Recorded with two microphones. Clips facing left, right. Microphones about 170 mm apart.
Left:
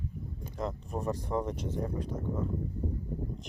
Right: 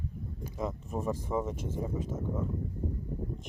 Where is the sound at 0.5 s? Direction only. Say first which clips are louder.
Even; 5° right (ahead or behind).